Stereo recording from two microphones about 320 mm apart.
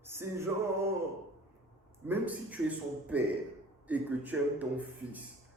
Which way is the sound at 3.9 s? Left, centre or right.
Centre.